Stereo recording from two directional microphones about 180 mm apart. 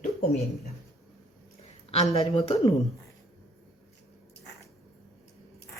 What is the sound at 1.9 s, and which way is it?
Speech, 35° left (ahead or behind).